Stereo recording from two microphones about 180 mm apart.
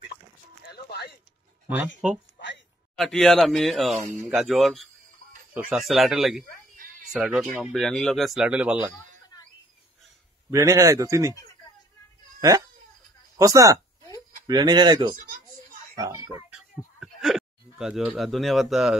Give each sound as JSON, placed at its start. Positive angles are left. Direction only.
{"t": 0.7, "sound": "a sound", "side_deg": 65}
{"t": 2.0, "sound": "speech", "side_deg": -5}
{"t": 10.5, "sound": "speech", "side_deg": -20}
{"t": 12.4, "sound": "speech", "side_deg": -20}
{"t": 15.2, "sound": "a sound", "side_deg": -50}
{"t": 17.0, "sound": "speech", "side_deg": 0}